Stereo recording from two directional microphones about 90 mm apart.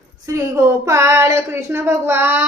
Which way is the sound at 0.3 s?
35° right (ahead or behind).